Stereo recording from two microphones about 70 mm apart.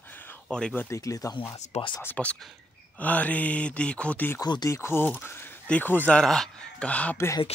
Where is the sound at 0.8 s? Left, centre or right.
Left.